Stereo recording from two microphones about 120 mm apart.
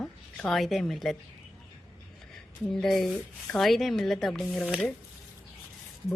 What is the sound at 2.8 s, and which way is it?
A woman's voice, 5° left (ahead or behind).